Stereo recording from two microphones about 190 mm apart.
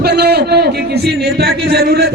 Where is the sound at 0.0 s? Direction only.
60° right (ahead or behind).